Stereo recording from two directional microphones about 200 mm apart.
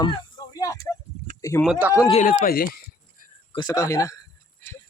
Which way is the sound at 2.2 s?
45° left (ahead or behind).